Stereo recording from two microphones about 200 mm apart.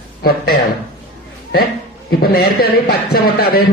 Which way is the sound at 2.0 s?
50° left (ahead or behind).